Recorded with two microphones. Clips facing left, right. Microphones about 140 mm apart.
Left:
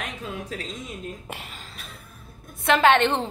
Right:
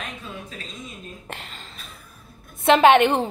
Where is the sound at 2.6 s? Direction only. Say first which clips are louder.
Right 4 dB; 20° right (ahead or behind).